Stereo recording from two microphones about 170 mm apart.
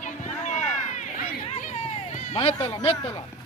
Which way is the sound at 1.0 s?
45° left (ahead or behind).